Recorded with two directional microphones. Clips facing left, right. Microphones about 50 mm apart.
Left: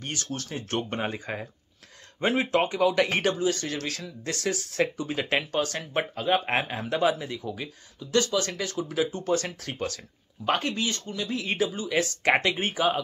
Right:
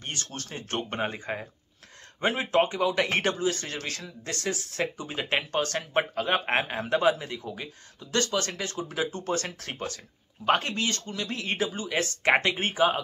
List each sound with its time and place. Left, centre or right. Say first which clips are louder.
0.0 s speech: left 3 dB; right
1.3 s speech: even; centre
5.5 s speech: even; right
8.0 s speech: left 3 dB; right
8.5 s speech: left 2 dB; right
10.8 s speech: even; right